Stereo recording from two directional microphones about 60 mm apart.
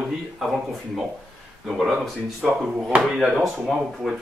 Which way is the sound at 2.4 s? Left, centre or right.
Centre.